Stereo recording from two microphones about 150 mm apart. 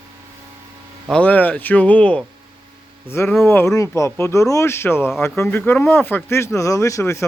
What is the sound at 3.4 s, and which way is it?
Speech, 15° left (ahead or behind).